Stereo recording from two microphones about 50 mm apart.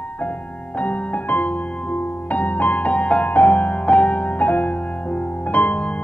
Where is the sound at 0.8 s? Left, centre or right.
Left.